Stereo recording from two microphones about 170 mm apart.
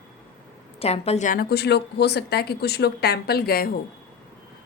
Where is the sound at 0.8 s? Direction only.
35° left (ahead or behind); by 3.7 s 65° left (ahead or behind).